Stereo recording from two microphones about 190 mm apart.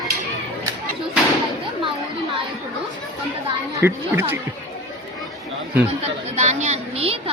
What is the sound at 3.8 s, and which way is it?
Speech, 10° right (ahead or behind).